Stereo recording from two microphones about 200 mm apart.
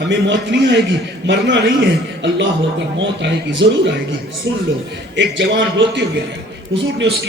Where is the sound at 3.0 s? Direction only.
60° right (ahead or behind).